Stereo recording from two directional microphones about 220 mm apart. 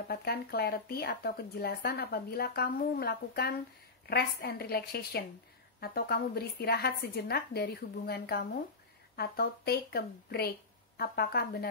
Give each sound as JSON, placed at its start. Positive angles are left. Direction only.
{"t": 0.1, "sound": "speech", "side_deg": 45}